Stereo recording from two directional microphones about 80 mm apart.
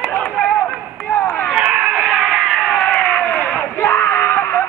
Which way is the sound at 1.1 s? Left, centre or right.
Left.